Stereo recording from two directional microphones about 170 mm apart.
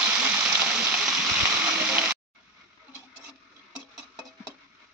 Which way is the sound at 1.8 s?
10° right (ahead or behind).